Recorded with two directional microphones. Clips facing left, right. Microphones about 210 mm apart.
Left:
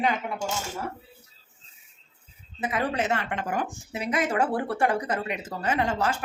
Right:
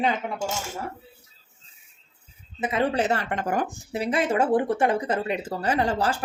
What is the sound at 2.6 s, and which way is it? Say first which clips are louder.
Speech: right 3 dB; 25° right (ahead or behind).